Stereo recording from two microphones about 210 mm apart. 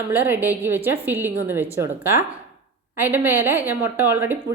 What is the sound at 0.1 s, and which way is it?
A woman's voice, 10° right (ahead or behind).